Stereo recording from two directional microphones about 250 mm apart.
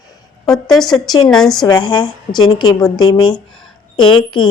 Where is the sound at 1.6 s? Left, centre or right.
Centre.